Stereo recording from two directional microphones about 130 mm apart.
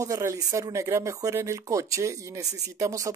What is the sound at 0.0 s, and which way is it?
Speech, 25° right (ahead or behind).